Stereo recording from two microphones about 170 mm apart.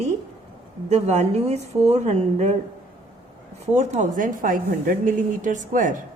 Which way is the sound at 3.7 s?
40° right (ahead or behind).